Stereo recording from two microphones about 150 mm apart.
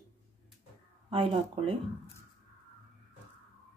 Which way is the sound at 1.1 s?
35° right (ahead or behind).